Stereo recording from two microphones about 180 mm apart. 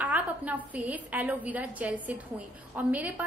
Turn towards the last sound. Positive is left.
turn(degrees=-10)  # may be behind; listen again after turning